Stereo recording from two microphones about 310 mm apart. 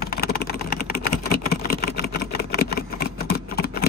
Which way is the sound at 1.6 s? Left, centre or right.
Left.